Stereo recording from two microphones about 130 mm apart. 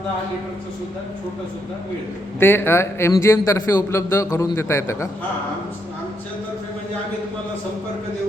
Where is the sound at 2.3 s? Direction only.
15° left (ahead or behind).